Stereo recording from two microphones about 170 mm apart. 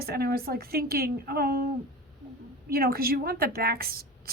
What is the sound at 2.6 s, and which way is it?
Speech, 65° right (ahead or behind).